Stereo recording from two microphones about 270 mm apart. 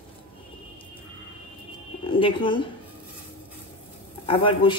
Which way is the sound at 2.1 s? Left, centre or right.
Centre.